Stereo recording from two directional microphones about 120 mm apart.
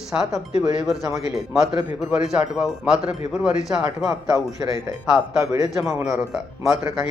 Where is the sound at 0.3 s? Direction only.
Centre (ahead or behind).